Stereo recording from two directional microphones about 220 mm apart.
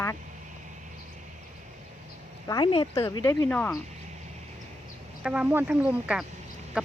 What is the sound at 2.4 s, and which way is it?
A woman's voice, 20° left (ahead or behind).